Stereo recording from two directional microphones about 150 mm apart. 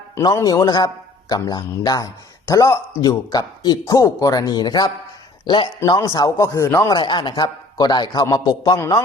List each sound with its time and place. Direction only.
0.2 s speech: 20° left (ahead or behind)
6.9 s speech: 30° left (ahead or behind)